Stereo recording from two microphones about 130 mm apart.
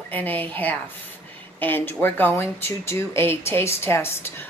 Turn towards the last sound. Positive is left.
turn(degrees=20)  # may be behind; listen again after turning